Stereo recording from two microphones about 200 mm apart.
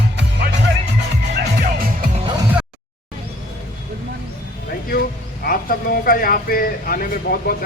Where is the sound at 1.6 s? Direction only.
45° right (ahead or behind).